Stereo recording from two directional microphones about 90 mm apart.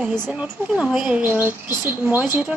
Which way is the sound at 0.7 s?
15° right (ahead or behind).